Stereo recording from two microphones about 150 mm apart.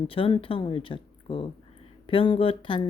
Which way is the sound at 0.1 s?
35° left (ahead or behind).